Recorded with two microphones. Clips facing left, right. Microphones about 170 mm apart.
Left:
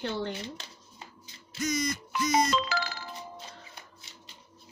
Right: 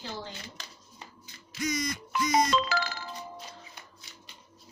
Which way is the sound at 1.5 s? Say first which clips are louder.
Even; 30° left (ahead or behind).